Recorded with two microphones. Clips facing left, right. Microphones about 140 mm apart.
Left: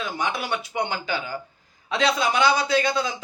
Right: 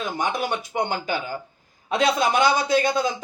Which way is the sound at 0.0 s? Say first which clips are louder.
Right 2 dB; 50° right (ahead or behind).